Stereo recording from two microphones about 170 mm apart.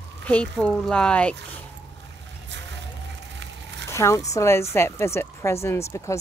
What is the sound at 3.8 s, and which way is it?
A woman's voice, 15° left (ahead or behind).